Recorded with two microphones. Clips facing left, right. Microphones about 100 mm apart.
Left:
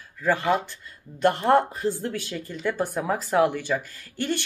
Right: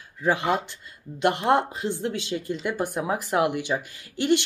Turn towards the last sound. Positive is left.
turn(degrees=-20)  # may be behind; listen again after turning